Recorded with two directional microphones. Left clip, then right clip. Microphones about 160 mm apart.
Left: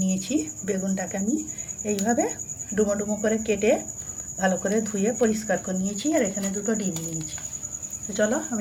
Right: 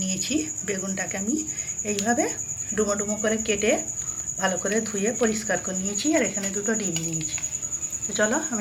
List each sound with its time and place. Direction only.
0.0 s speech: 20° left (ahead or behind)
2.0 s speech: 20° left (ahead or behind)
8.1 s speech: 10° left (ahead or behind)